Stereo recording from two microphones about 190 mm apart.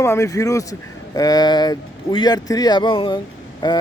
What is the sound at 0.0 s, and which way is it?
A man's voice, 15° left (ahead or behind).